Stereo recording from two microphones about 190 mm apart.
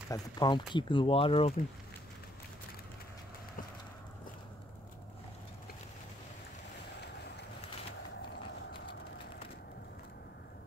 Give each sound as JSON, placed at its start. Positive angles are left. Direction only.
{"t": 0.1, "sound": "speech", "side_deg": 25}